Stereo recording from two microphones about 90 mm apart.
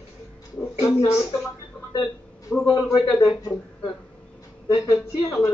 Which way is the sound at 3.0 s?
40° left (ahead or behind).